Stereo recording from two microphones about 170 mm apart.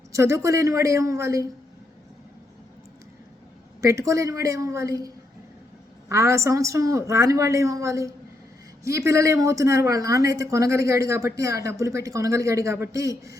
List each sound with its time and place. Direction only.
0.1 s a man's voice: 15° right (ahead or behind)
3.8 s a man's voice: 20° right (ahead or behind)